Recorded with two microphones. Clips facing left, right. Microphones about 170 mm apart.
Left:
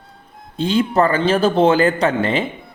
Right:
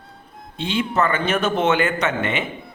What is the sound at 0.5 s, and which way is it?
Speech, 40° left (ahead or behind).